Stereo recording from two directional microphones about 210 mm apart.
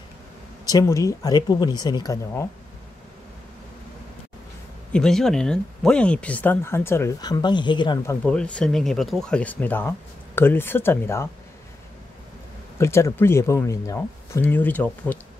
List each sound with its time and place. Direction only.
0.7 s speech: 15° left (ahead or behind)
4.9 s speech: centre (ahead or behind)
12.7 s speech: 15° left (ahead or behind)